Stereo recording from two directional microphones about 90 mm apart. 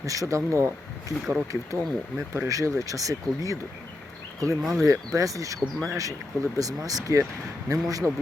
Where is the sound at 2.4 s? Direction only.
40° right (ahead or behind).